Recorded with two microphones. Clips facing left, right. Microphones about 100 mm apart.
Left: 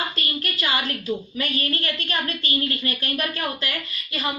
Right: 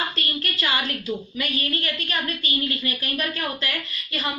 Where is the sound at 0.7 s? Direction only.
35° left (ahead or behind).